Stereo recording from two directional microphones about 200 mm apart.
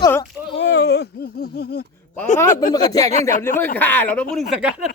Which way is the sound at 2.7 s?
20° left (ahead or behind).